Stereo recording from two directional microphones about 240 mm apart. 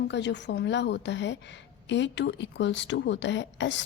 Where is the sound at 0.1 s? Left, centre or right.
Left.